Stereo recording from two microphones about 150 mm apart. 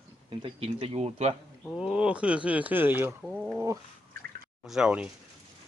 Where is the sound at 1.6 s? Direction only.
Centre (ahead or behind).